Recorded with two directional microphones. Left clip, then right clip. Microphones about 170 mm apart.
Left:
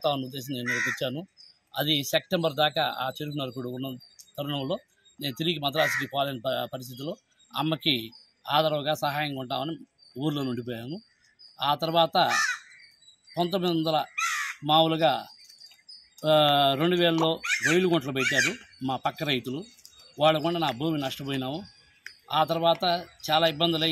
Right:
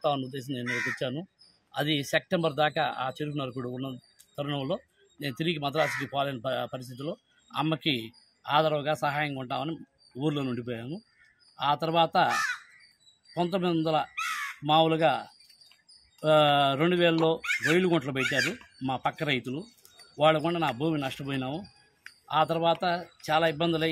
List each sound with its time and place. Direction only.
0.0 s speech: centre (ahead or behind)